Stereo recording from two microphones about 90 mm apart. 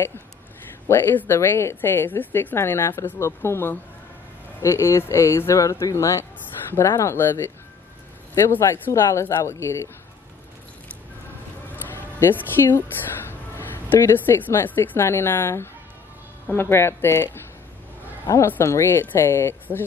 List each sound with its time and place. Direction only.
0.8 s a woman's voice: 25° left (ahead or behind)
8.7 s a woman's voice: 20° left (ahead or behind)
11.7 s a sound: 20° left (ahead or behind)
13.3 s a woman's voice: 25° left (ahead or behind)